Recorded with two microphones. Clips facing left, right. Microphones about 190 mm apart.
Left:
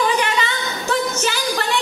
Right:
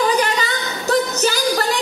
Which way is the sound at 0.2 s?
40° right (ahead or behind).